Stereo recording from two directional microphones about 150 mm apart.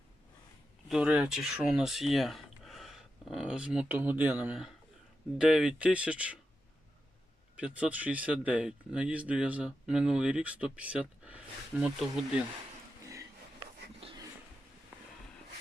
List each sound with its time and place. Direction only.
0.9 s speech: 5° right (ahead or behind)
7.6 s speech: 10° right (ahead or behind)
14.0 s a sound: 40° right (ahead or behind)